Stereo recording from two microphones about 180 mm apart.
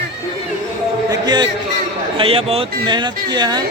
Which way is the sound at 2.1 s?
30° right (ahead or behind).